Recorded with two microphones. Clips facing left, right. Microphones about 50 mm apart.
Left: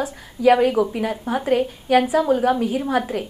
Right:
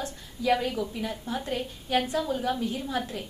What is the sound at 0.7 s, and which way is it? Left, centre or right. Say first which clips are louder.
Speech: left 11 dB; left.